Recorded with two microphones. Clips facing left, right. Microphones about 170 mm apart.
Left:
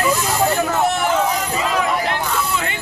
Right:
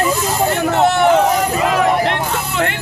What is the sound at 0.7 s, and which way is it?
Vehicle, 65° right (ahead or behind).